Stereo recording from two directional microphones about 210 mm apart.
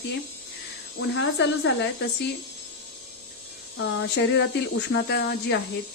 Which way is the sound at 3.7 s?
60° left (ahead or behind).